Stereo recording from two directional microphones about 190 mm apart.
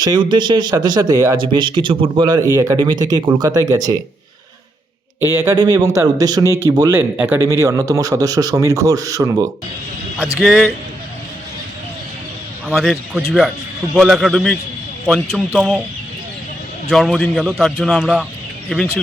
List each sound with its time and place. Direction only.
0.0 s speech: 25° right (ahead or behind)
5.3 s speech: 15° right (ahead or behind)
10.4 s speech: centre (ahead or behind)
12.7 s speech: centre (ahead or behind)
16.9 s speech: centre (ahead or behind)